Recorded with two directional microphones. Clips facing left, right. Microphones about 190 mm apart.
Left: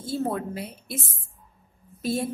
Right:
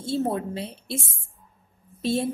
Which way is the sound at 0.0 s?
25° right (ahead or behind).